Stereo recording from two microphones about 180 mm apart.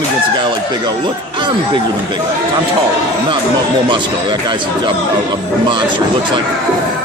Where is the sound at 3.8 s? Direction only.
25° right (ahead or behind).